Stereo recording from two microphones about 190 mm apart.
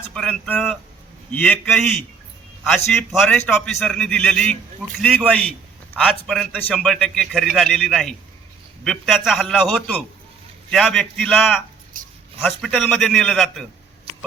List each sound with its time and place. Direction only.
0.1 s a man's voice: 5° left (ahead or behind)
11.9 s a sound: 45° right (ahead or behind)
12.4 s a man's voice: centre (ahead or behind)